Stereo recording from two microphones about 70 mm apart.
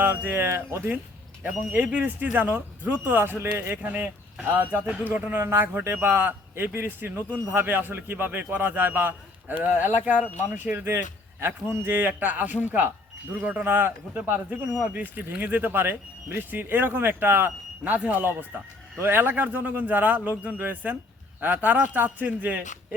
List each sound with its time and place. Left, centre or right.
0.0 s speech: right
1.7 s speech: centre
5.4 s speech: right